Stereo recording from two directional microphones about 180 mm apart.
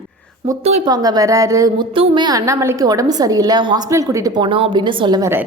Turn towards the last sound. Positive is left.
turn(degrees=-15)  # may be behind; listen again after turning